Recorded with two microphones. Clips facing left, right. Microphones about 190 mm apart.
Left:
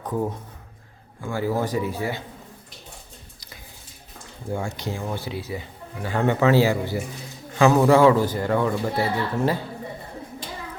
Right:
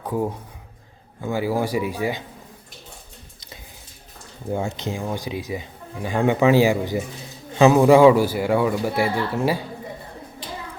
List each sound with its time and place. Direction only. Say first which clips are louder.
0.0 s speech: right 2 dB; 10° right (ahead or behind)
4.5 s speech: right 3 dB; 20° right (ahead or behind)